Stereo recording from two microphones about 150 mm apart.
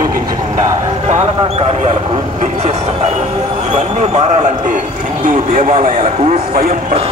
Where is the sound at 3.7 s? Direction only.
50° right (ahead or behind).